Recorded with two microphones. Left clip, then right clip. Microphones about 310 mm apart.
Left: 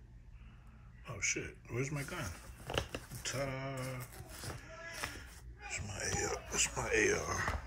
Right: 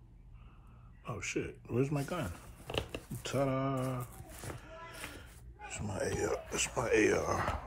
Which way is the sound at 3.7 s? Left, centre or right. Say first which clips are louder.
Right 6 dB; centre.